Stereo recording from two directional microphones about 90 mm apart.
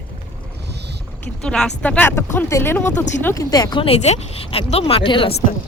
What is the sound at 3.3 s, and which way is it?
Speech, 45° left (ahead or behind).